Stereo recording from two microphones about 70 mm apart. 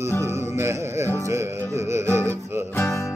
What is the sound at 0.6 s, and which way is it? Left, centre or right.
Music, right.